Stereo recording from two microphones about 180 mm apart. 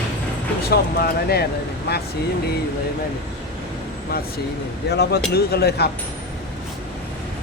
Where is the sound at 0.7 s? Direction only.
60° left (ahead or behind).